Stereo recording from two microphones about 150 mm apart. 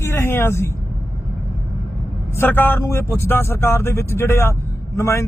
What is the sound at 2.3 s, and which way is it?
Speech, 15° left (ahead or behind).